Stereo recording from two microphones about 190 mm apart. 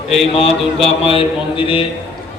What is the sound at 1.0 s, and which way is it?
Speech, 30° left (ahead or behind).